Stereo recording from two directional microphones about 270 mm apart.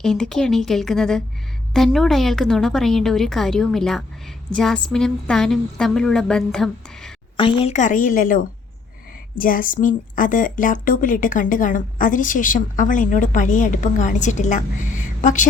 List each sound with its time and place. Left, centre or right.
0.0 s a woman's voice: centre
7.3 s a woman's voice: centre